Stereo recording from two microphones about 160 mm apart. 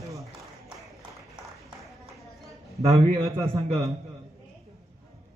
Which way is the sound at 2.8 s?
40° right (ahead or behind).